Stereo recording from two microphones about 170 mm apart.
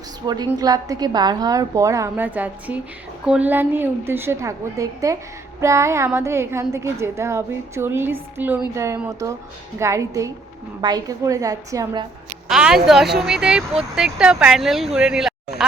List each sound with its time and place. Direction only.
0.3 s a woman's voice: 25° right (ahead or behind)
12.5 s speech: 5° right (ahead or behind)